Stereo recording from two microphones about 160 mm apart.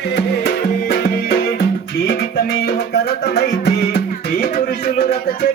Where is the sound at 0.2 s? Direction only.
80° left.